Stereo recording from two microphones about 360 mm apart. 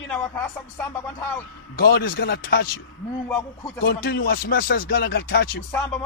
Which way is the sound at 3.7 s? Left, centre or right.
Left.